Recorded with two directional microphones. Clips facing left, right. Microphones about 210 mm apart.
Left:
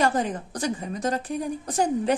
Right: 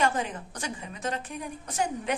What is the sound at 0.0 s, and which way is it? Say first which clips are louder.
A woman's voice: left 4 dB; 35° left (ahead or behind).